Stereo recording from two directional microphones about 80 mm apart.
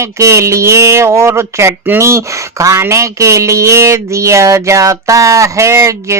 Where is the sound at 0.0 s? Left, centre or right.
Right.